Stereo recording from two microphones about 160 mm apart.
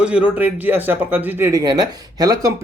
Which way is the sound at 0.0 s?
10° right (ahead or behind).